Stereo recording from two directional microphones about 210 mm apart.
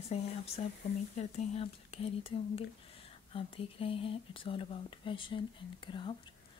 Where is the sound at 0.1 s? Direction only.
30° left (ahead or behind).